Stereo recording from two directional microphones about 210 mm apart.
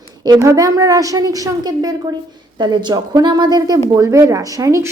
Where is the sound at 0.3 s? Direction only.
15° right (ahead or behind).